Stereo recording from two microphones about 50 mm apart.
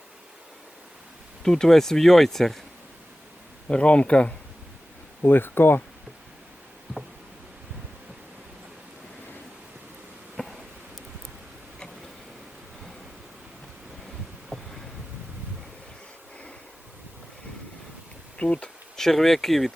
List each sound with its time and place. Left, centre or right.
1.5 s speech: centre
3.7 s speech: left
5.2 s speech: left
10.3 s a sound: centre
14.5 s boat: centre
18.3 s bee: left
18.9 s speech: centre